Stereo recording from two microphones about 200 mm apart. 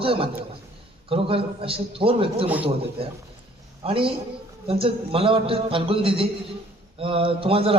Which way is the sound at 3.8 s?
25° right (ahead or behind).